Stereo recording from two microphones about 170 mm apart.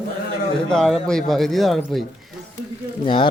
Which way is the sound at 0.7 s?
5° left (ahead or behind).